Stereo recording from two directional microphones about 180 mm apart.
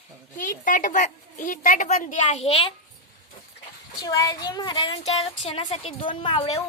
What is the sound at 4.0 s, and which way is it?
A woman's voice, 20° left (ahead or behind).